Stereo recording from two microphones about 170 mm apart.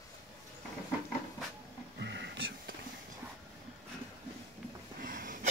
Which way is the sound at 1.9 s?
90° right.